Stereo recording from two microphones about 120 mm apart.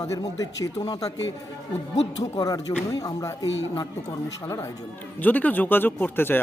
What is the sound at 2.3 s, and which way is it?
A man's voice, 30° left (ahead or behind).